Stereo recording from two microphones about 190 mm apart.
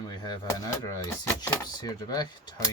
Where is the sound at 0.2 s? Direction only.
20° left (ahead or behind).